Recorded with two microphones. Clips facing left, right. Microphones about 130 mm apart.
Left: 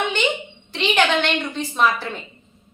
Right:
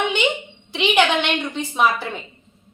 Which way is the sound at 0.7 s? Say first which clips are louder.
Right 1 dB; 15° right (ahead or behind).